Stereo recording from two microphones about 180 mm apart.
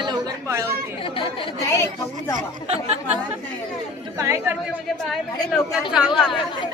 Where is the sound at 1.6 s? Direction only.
15° left (ahead or behind).